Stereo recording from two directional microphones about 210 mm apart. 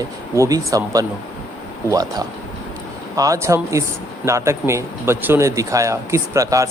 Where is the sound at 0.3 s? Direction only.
15° right (ahead or behind).